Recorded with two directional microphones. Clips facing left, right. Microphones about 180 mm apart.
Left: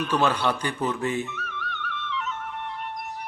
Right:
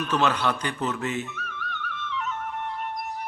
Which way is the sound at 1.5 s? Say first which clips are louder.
Left 1 dB; 40° right (ahead or behind).